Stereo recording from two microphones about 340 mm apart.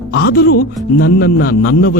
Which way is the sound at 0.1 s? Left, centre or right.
Left.